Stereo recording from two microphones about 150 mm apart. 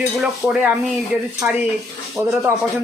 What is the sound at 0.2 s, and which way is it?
Speech, 5° right (ahead or behind).